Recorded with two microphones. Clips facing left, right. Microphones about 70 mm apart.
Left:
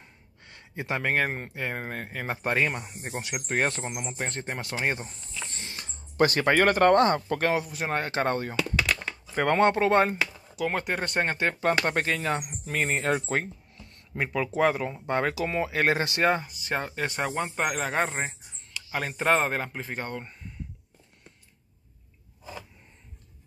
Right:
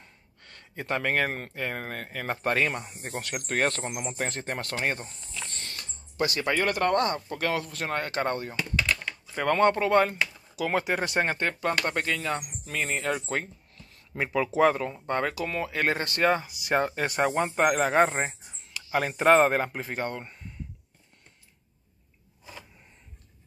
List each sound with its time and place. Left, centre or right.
0.0 s speech: centre
6.1 s speech: left
7.5 s speech: centre
7.9 s speech: left
10.5 s speech: centre
11.9 s speech: left
13.7 s speech: centre
15.0 s speech: centre
16.3 s speech: centre